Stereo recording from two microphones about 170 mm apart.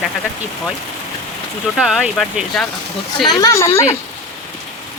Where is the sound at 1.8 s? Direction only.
Centre (ahead or behind).